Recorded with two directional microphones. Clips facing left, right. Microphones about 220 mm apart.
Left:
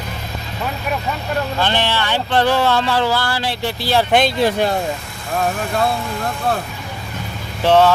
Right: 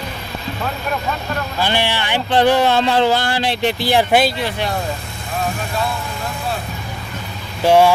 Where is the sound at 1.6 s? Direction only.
10° right (ahead or behind).